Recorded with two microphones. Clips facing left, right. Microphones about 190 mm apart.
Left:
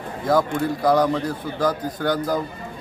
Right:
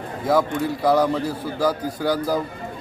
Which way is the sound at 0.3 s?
5° right (ahead or behind).